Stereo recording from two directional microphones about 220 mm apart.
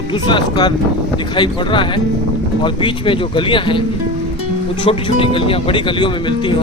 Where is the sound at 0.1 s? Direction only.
20° left (ahead or behind).